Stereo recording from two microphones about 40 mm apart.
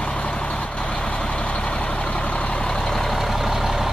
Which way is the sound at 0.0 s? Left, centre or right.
Left.